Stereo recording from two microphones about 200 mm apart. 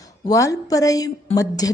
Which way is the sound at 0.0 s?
15° left (ahead or behind).